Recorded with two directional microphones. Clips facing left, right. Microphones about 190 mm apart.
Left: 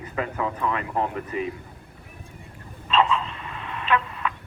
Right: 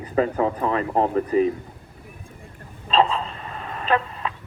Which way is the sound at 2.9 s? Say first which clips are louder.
Right 2 dB; 35° right (ahead or behind).